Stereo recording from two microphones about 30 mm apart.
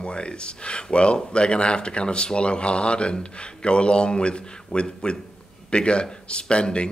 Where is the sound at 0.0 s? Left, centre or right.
Left.